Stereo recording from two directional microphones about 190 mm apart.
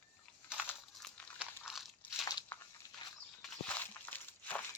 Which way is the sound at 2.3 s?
20° left (ahead or behind).